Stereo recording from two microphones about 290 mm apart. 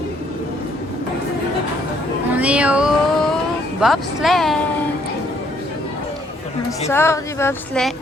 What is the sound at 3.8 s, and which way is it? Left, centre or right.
Speech, centre.